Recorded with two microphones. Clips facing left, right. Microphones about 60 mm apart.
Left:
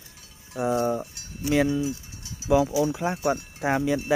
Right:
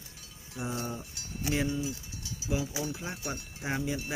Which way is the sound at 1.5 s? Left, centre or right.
Left.